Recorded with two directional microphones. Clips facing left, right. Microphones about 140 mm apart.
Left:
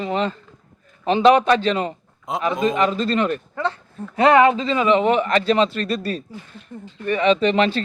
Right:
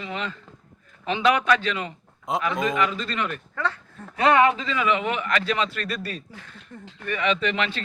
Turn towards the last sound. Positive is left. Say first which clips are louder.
# left 8 dB
turn(degrees=35)  # may be behind; listen again after turning